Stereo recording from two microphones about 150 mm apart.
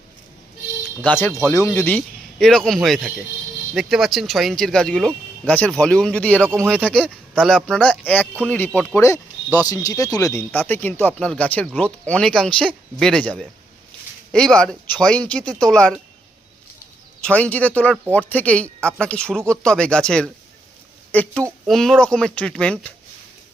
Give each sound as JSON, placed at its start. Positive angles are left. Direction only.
{"t": 1.0, "sound": "speech", "side_deg": 10}
{"t": 17.2, "sound": "speech", "side_deg": 5}